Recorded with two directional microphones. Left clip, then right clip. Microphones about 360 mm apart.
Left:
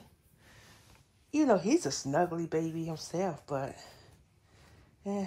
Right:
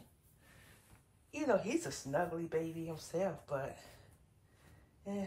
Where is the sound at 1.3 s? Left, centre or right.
Centre.